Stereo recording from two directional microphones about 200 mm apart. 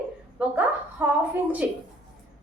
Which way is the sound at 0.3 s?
5° right (ahead or behind).